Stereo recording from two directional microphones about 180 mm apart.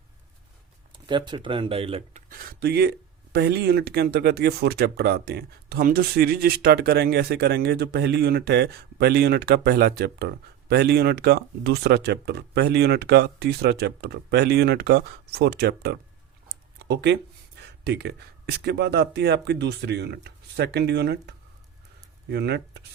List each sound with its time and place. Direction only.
0.9 s speech: 25° right (ahead or behind)
2.3 s speech: 55° right (ahead or behind)
16.7 s a sound: 70° right (ahead or behind)
17.8 s speech: 70° right (ahead or behind)